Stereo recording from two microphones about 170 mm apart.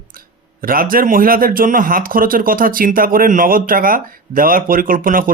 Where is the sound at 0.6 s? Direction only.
55° right (ahead or behind).